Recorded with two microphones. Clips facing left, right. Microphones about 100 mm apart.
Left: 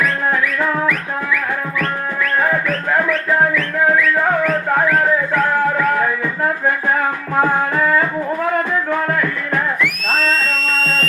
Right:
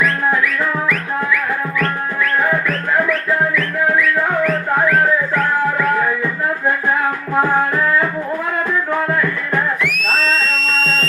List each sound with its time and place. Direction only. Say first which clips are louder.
10.0 s music: even; 45° left (ahead or behind)